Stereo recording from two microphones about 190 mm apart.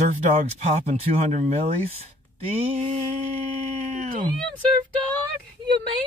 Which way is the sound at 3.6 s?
40° right (ahead or behind).